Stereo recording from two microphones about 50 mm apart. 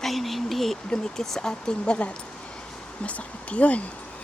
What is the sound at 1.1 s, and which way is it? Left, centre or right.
Speech, centre.